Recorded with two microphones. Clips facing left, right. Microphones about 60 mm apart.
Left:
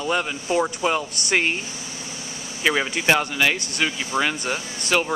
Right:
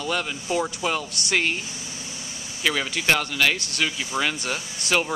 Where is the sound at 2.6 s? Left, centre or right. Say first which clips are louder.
Left 3 dB; left.